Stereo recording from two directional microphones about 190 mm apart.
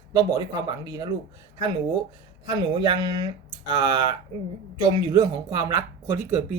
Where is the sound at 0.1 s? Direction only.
15° right (ahead or behind).